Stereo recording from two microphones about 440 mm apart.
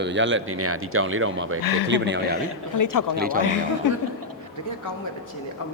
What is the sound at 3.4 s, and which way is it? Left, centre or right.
Speech, left.